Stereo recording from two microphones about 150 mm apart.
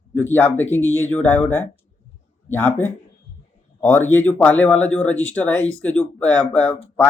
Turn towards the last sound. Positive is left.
turn(degrees=10)  # may be behind; listen again after turning